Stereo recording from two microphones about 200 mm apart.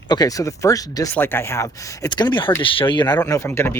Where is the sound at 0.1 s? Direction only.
20° left (ahead or behind).